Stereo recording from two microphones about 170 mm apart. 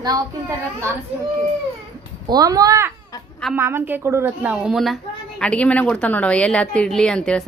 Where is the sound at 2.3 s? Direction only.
20° right (ahead or behind).